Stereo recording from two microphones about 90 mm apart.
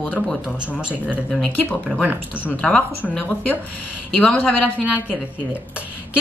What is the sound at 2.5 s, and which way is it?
A woman's voice, 15° left (ahead or behind).